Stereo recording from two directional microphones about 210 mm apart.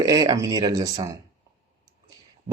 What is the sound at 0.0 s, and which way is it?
Speech, 20° right (ahead or behind).